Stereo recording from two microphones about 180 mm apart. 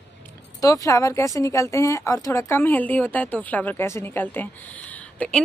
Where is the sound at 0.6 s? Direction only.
20° left (ahead or behind).